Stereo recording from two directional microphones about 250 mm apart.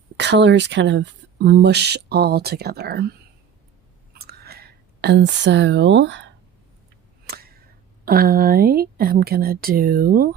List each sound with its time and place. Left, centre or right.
0.2 s speech: right
4.2 s whispering: right
7.3 s whip: right
8.0 s speech: right